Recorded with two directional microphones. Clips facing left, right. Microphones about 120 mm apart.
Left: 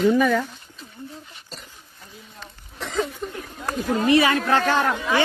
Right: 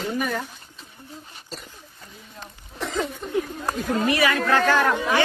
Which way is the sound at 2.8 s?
Centre (ahead or behind).